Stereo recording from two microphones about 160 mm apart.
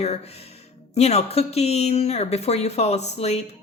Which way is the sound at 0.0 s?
40° left (ahead or behind).